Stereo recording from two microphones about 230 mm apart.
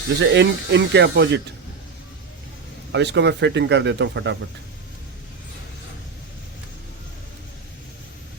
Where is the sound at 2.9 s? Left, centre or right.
Right.